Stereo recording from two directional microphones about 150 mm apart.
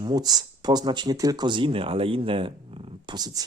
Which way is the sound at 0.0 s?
25° right (ahead or behind).